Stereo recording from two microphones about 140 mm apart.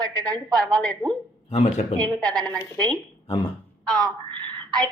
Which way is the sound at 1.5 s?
50° left (ahead or behind).